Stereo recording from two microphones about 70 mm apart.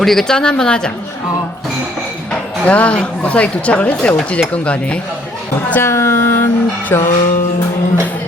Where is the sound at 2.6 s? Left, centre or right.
Centre.